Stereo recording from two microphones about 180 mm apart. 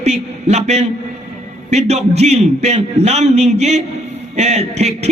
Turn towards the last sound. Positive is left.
turn(degrees=-35)  # may be behind; listen again after turning